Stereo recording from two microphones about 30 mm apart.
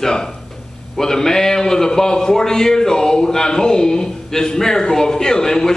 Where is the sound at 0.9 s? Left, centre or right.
Centre.